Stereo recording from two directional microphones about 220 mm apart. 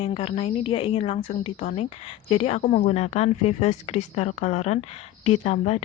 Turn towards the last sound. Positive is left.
turn(degrees=30)  # may be behind; listen again after turning